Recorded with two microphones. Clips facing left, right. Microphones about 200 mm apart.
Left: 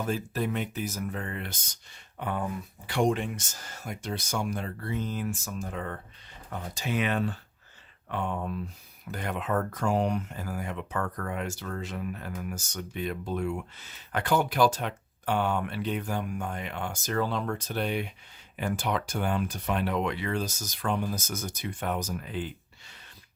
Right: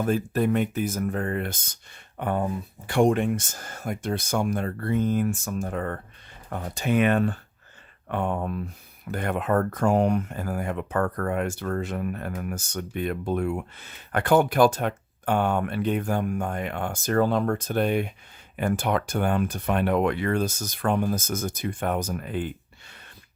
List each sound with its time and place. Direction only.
0.0 s speech: 50° right (ahead or behind)